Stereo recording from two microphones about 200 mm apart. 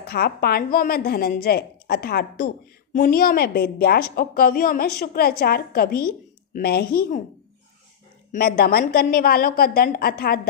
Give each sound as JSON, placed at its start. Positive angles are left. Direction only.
{"t": 0.0, "sound": "a woman's voice", "side_deg": 50}
{"t": 8.3, "sound": "a woman's voice", "side_deg": 50}